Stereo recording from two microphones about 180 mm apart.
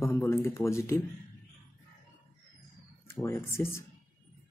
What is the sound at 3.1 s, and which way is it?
Speech, 15° left (ahead or behind).